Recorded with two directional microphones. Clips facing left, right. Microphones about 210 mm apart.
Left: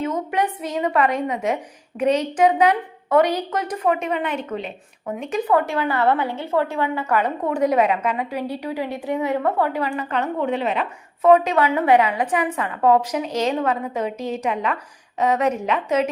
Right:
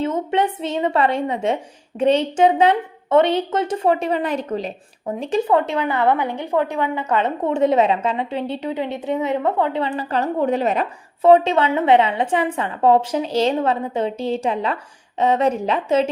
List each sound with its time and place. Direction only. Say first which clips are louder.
0.0 s a woman's voice: right 3 dB; 25° right (ahead or behind); by 10.8 s 40° right (ahead or behind)
11.2 s a woman's voice: right 2 dB; 30° right (ahead or behind)